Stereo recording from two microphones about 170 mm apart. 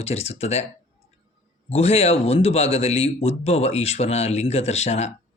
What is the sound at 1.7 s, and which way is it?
Speech, 40° left (ahead or behind).